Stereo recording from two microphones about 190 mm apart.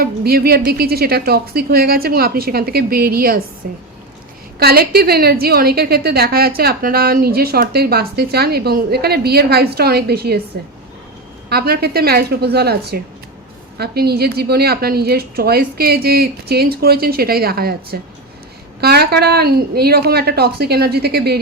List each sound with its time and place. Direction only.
0.0 s a woman's voice: 55° right (ahead or behind)
4.6 s a woman's voice: 55° right (ahead or behind)
11.4 s a woman's voice: 55° right (ahead or behind)